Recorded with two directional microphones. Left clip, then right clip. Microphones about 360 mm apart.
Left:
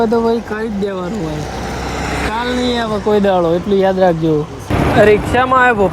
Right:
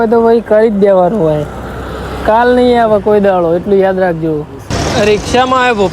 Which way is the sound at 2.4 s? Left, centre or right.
Centre.